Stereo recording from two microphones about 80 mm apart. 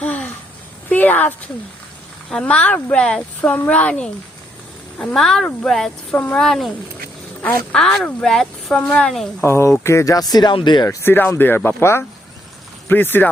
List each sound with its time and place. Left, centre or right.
0.0 s a sound: centre
2.3 s speech: centre
7.7 s speech: centre
8.7 s speech: centre
9.4 s speech: left
10.5 s speech: left
10.8 s speech: left